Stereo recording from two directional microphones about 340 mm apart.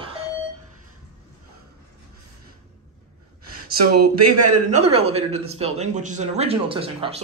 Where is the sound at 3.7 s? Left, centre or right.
Right.